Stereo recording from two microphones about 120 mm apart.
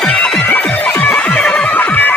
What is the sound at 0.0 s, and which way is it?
Music, 5° left (ahead or behind).